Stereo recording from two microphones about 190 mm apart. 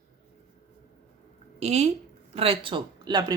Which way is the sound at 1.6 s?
35° right (ahead or behind).